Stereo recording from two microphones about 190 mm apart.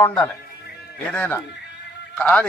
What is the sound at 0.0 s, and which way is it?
A man's voice, 15° left (ahead or behind).